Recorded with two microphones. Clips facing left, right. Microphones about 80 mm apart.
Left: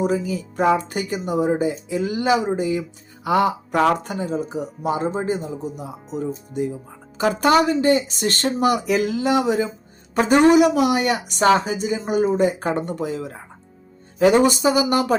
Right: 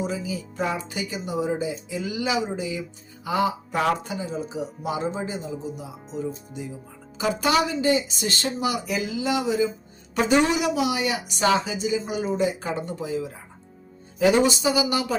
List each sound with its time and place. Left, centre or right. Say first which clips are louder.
0.0 s a woman's voice: left 7 dB; left
3.2 s speech: left 5 dB; left
4.8 s a woman's voice: left 6 dB; left
8.8 s speech: left 7 dB; left
10.2 s a woman's voice: left 7 dB; left
14.3 s a woman's voice: left 4 dB; left